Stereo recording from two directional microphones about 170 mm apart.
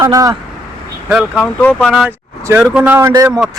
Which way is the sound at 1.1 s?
5° left (ahead or behind).